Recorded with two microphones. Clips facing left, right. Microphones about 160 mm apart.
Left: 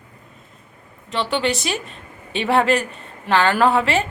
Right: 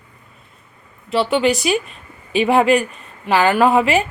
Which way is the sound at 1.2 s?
5° right (ahead or behind).